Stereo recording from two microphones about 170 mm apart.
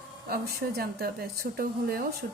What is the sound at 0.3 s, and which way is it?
A woman's voice, 65° right (ahead or behind).